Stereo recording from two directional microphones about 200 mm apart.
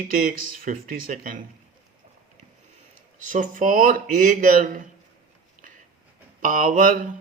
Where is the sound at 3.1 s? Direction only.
40° right (ahead or behind).